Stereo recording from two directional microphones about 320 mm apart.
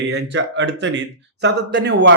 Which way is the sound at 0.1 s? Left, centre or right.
Right.